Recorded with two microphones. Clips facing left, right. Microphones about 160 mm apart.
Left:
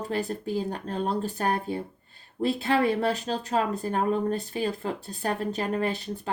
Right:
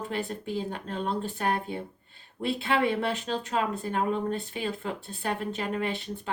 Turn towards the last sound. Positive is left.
turn(degrees=40)  # may be behind; listen again after turning